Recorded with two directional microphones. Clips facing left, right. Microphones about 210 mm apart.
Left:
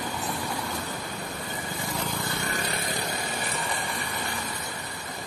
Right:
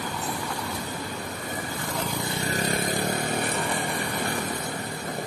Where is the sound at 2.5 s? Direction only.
45° right (ahead or behind).